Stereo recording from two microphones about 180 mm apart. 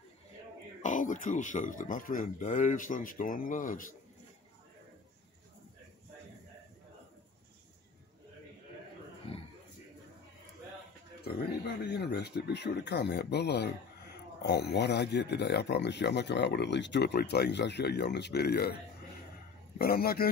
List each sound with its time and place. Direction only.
0.8 s speech: 45° left (ahead or behind)
9.3 s a sound: 30° left (ahead or behind)
11.8 s speech: 65° left (ahead or behind)
19.8 s a man's voice: 55° left (ahead or behind)